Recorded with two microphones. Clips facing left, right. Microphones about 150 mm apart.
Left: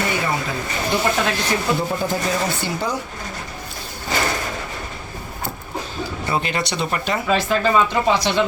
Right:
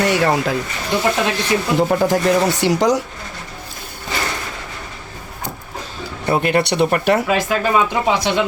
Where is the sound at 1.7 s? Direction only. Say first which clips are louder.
Right 7 dB; 75° right (ahead or behind).